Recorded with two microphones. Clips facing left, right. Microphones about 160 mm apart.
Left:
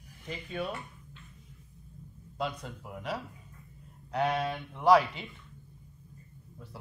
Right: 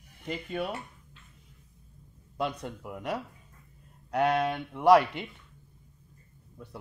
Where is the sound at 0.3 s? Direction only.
60° right (ahead or behind).